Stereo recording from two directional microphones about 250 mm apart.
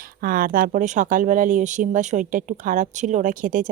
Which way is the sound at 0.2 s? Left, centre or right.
Right.